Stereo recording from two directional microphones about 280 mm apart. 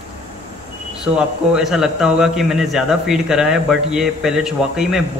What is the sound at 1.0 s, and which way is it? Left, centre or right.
A man's voice, centre.